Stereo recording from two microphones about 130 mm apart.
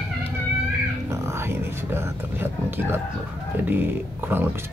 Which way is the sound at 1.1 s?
20° right (ahead or behind).